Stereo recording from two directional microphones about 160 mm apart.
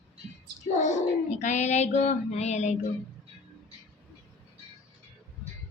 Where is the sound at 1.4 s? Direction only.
45° left (ahead or behind).